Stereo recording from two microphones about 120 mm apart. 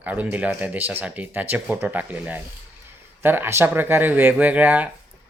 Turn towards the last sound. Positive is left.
turn(degrees=-15)  # may be behind; listen again after turning